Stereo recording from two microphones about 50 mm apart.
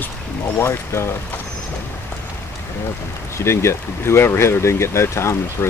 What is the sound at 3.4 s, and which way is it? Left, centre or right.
Speech, left.